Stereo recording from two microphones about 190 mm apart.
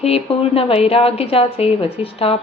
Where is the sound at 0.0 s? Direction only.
30° left (ahead or behind).